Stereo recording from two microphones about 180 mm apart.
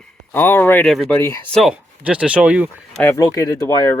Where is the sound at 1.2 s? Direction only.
15° left (ahead or behind).